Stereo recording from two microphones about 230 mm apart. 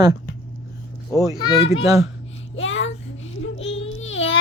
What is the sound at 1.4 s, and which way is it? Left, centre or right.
Speech, centre.